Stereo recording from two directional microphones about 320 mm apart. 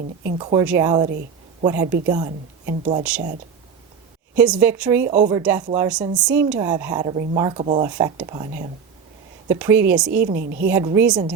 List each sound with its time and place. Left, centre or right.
0.3 s a woman's voice: centre
4.4 s a woman's voice: centre
5.0 s a woman's voice: right
5.3 s speech: centre
9.5 s a woman's voice: centre
10.1 s a woman's voice: right
10.8 s speech: centre